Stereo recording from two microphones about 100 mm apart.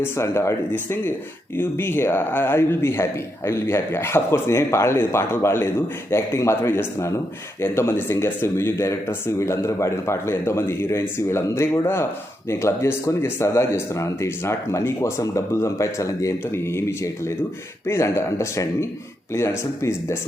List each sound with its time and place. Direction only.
0.0 s a man's voice: 25° left (ahead or behind)